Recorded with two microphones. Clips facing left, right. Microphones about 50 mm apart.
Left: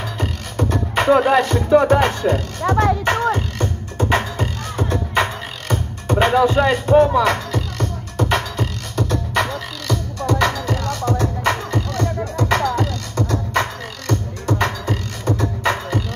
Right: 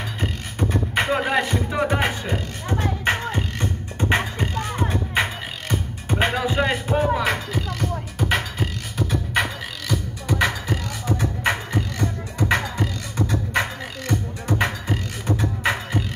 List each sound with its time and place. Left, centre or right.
0.2 s beatboxing: centre
2.6 s music: left
3.3 s music: right
12.8 s beatboxing: centre
15.6 s beatboxing: centre